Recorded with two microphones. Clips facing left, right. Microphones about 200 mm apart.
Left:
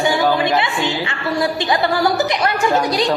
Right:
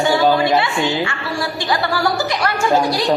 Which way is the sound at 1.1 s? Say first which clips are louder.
Left 4 dB; 20° left (ahead or behind).